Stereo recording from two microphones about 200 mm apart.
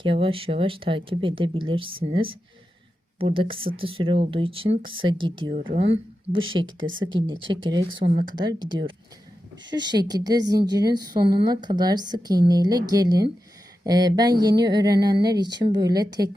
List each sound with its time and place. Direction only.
0.0 s speech: 25° right (ahead or behind)
6.7 s speech: 75° right (ahead or behind)
7.0 s speech: 25° right (ahead or behind)
8.1 s speech: 45° right (ahead or behind)
8.4 s speech: 20° right (ahead or behind)